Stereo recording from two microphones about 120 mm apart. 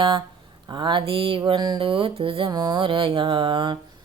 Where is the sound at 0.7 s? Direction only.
40° right (ahead or behind).